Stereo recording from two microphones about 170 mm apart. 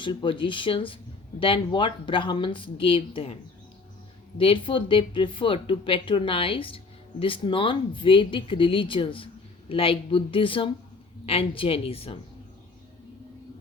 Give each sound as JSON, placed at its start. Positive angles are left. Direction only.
{"t": 0.0, "sound": "speech", "side_deg": 30}
{"t": 4.4, "sound": "speech", "side_deg": 30}